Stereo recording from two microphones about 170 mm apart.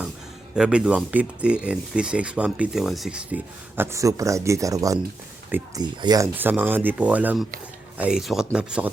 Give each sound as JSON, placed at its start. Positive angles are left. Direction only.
{"t": 0.5, "sound": "speech", "side_deg": -5}
{"t": 5.8, "sound": "speech", "side_deg": -25}
{"t": 6.3, "sound": "speech", "side_deg": -10}